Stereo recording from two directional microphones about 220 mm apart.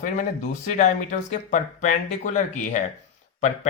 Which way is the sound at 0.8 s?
35° left (ahead or behind).